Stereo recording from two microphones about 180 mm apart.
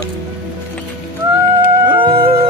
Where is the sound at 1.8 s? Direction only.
25° right (ahead or behind).